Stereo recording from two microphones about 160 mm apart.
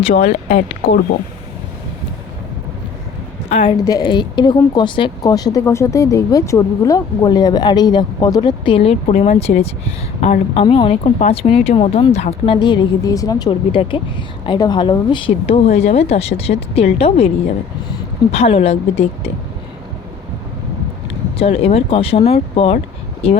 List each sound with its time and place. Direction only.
0.3 s speech: 45° left (ahead or behind)
3.5 s a woman's voice: 35° left (ahead or behind)
21.3 s speech: 35° left (ahead or behind)